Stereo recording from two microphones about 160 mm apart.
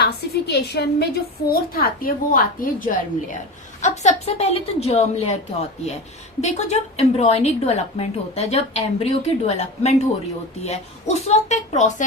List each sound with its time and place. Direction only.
0.0 s a woman's voice: 90° left; by 5.4 s 40° left (ahead or behind)
6.4 s a woman's voice: 45° left (ahead or behind)